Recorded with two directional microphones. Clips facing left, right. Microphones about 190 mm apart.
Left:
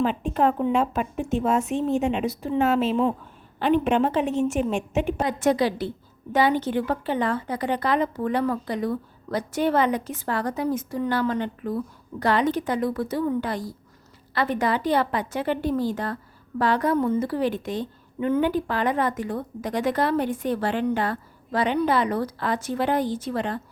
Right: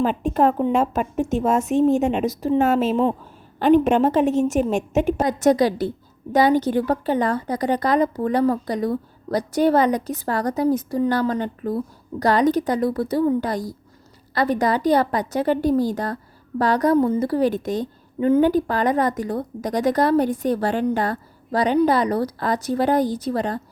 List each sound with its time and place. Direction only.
0.0 s a woman's voice: 45° right (ahead or behind)